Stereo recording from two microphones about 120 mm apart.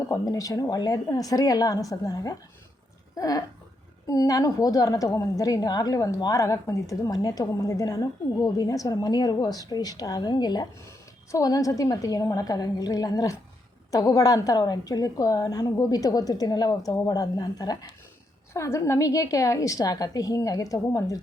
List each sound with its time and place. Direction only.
0.1 s a woman's voice: 30° left (ahead or behind)
10.8 s a woman's voice: 25° left (ahead or behind)